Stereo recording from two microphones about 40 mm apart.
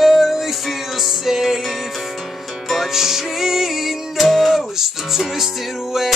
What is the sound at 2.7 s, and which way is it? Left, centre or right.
Music, centre.